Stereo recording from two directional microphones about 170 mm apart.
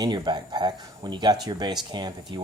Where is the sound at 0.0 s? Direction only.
25° right (ahead or behind).